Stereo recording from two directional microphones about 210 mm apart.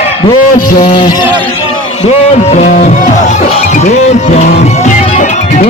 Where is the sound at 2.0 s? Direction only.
30° left (ahead or behind).